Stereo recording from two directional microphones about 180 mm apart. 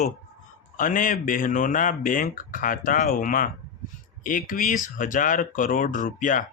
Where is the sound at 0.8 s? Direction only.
50° left (ahead or behind).